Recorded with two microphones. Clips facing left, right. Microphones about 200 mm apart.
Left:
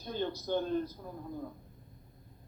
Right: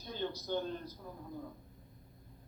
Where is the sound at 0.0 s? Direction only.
55° left (ahead or behind).